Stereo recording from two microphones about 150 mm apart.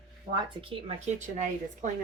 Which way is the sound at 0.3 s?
35° right (ahead or behind).